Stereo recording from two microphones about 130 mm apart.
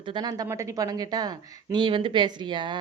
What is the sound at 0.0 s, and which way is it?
Speech, 35° right (ahead or behind).